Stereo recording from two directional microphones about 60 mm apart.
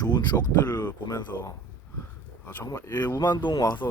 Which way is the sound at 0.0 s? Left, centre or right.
Left.